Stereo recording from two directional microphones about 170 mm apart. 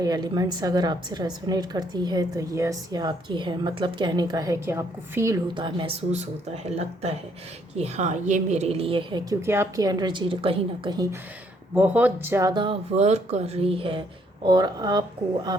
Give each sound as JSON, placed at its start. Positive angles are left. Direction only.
{"t": 0.0, "sound": "a woman's voice", "side_deg": -25}
{"t": 5.5, "sound": "speech", "side_deg": -30}
{"t": 9.3, "sound": "a woman's voice", "side_deg": -15}
{"t": 11.7, "sound": "speech", "side_deg": -10}
{"t": 12.9, "sound": "a woman's voice", "side_deg": -40}